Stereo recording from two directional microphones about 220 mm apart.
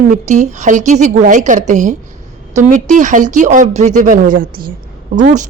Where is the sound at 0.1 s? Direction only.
30° right (ahead or behind).